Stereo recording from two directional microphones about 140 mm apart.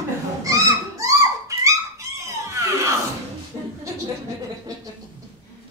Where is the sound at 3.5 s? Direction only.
35° right (ahead or behind).